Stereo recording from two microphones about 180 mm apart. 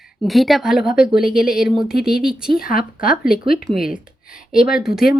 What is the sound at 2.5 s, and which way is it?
Speech, 50° left (ahead or behind).